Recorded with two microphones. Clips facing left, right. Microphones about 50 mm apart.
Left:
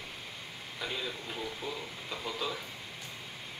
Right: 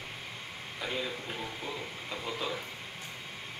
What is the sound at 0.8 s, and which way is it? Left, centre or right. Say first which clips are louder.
Speech: right 2 dB; right.